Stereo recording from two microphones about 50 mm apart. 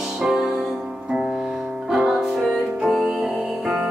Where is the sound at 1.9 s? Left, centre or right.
Centre.